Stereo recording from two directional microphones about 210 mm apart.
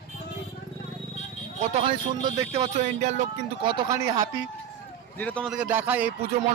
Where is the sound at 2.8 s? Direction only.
35° right (ahead or behind).